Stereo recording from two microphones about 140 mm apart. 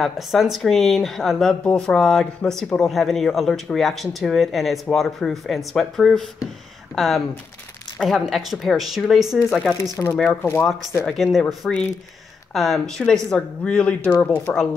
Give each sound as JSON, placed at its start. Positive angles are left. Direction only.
{"t": 0.0, "sound": "speech", "side_deg": 0}
{"t": 10.1, "sound": "speech", "side_deg": 10}
{"t": 11.1, "sound": "speech", "side_deg": 0}